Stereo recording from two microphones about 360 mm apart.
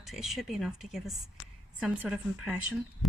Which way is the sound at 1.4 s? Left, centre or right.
Left.